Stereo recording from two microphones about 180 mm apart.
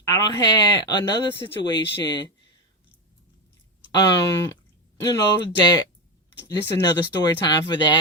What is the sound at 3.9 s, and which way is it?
Speech, 20° left (ahead or behind).